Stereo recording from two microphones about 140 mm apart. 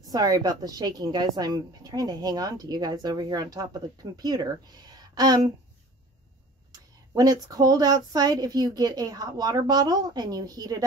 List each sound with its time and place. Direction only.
0.1 s a woman's voice: 25° right (ahead or behind)
7.4 s a woman's voice: 25° right (ahead or behind)